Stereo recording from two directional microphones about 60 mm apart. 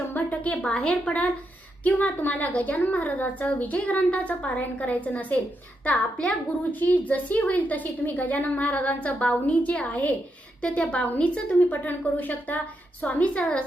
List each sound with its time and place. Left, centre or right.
0.1 s a sound: left
0.6 s a woman's voice: centre
1.8 s a woman's voice: left